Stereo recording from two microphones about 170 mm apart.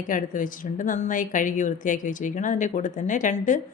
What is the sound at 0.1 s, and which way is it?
A woman's voice, 50° left (ahead or behind).